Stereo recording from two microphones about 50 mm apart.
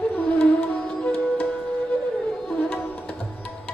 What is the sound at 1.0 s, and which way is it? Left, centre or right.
Music, left.